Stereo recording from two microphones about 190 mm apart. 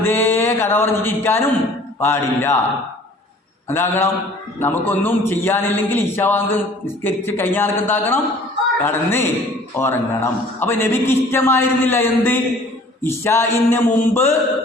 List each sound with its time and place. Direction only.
0.0 s a sound: 10° left (ahead or behind)
2.0 s a man's voice: 10° left (ahead or behind)
3.7 s a man's voice: 10° left (ahead or behind)